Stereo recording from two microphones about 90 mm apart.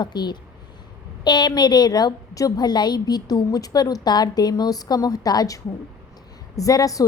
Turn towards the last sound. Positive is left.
turn(degrees=40)  # may be behind; listen again after turning